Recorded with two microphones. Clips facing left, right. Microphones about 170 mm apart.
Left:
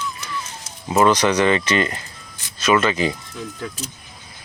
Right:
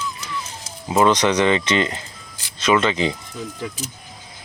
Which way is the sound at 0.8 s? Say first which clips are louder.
Even; 15° right (ahead or behind).